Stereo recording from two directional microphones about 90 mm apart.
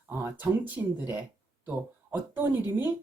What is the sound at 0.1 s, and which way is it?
Speech, 25° right (ahead or behind).